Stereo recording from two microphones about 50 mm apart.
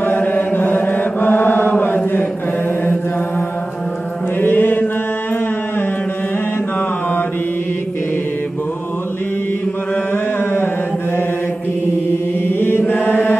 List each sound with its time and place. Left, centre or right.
0.0 s chant: left
0.5 s mantra: left
4.4 s mantra: left
10.1 s a sound: left
12.4 s chant: left
13.0 s chant: left